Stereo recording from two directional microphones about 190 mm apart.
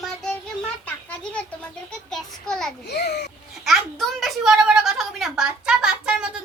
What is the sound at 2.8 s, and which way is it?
Speech, 60° left (ahead or behind).